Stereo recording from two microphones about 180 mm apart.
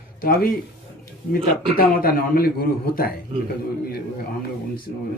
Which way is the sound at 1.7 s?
55° left (ahead or behind).